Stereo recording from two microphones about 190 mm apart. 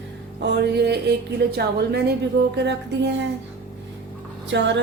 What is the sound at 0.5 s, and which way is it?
A woman's voice, 60° right (ahead or behind).